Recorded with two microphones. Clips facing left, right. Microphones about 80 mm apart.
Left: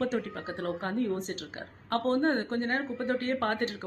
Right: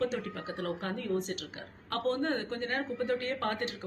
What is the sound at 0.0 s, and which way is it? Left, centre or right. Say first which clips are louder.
A woman's voice: left 2 dB; left.